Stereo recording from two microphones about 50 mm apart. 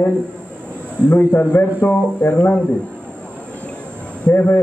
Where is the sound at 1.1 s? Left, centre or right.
Left.